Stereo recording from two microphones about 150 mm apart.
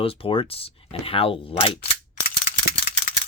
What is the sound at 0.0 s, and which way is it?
Speech, 40° left (ahead or behind).